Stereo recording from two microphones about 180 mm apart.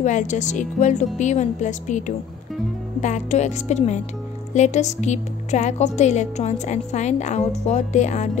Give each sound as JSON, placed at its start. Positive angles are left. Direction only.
{"t": 0.0, "sound": "a woman's voice", "side_deg": 40}